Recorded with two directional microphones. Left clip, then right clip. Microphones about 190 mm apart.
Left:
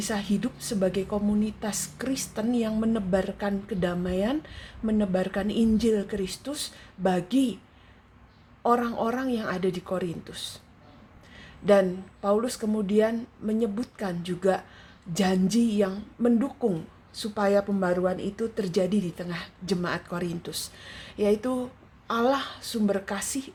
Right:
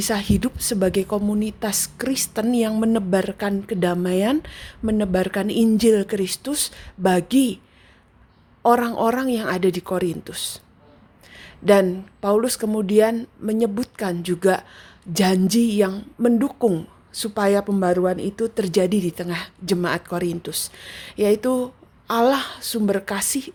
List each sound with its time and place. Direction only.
0.0 s speech: 50° right (ahead or behind)
8.6 s speech: 50° right (ahead or behind)